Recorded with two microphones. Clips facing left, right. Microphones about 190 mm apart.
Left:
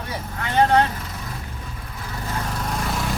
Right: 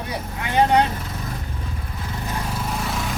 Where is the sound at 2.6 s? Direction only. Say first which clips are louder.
Even; centre (ahead or behind).